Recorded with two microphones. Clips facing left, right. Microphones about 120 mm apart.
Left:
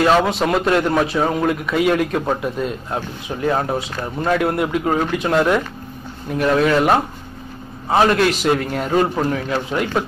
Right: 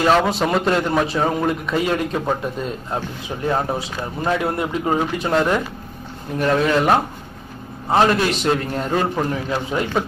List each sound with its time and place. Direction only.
0.0 s a man's voice: centre (ahead or behind)